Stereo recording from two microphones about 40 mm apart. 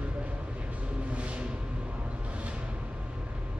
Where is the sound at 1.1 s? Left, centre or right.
Right.